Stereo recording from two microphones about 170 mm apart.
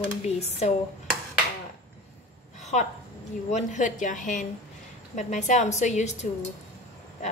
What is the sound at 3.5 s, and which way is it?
A woman's voice, 45° left (ahead or behind).